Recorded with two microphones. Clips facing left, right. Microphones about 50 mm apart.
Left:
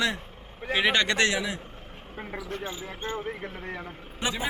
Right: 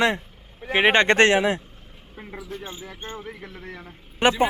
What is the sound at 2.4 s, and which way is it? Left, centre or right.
Speech, left.